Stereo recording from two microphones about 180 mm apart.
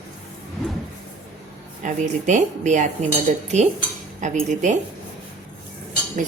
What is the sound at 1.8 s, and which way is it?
A woman's voice, 45° right (ahead or behind).